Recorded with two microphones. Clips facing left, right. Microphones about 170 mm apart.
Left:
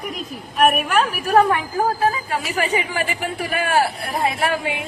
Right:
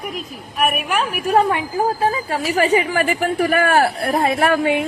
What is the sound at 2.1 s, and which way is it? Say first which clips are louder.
A woman's voice: right 3 dB; 35° right (ahead or behind).